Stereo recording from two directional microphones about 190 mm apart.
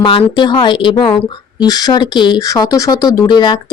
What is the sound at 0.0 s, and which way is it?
Speech, 25° left (ahead or behind).